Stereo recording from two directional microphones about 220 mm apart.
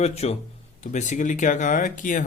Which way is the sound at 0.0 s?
30° left (ahead or behind).